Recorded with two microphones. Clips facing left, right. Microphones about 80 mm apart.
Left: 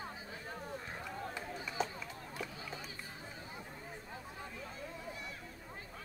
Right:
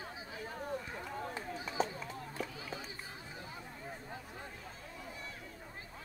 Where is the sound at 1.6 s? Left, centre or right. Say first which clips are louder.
Right 3 dB; right.